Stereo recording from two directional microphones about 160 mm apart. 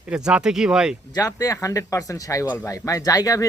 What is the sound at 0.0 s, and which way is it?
Speech, 5° right (ahead or behind).